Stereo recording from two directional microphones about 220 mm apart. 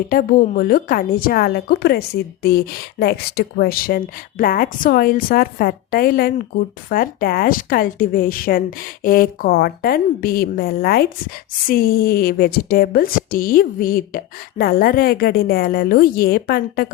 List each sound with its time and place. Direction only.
0.1 s a woman's voice: 40° left (ahead or behind)